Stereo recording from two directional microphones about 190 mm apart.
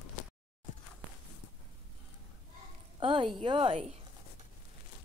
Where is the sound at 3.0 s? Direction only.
25° right (ahead or behind).